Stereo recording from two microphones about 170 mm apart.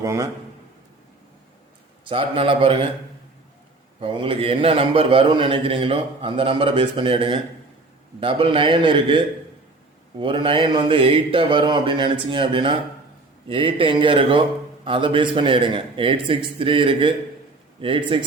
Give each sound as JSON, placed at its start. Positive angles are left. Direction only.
{"t": 0.0, "sound": "speech", "side_deg": -20}
{"t": 2.0, "sound": "a man's voice", "side_deg": -30}
{"t": 4.0, "sound": "a man's voice", "side_deg": -30}